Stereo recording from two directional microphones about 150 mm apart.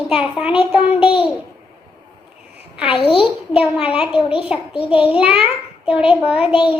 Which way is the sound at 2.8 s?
35° left (ahead or behind).